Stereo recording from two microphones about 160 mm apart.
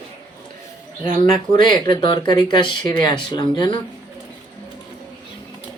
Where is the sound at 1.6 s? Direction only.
30° left (ahead or behind).